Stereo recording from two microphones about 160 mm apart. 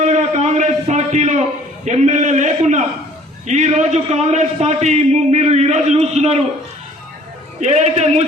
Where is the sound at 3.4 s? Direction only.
45° right (ahead or behind).